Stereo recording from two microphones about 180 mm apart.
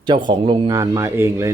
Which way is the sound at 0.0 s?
25° right (ahead or behind).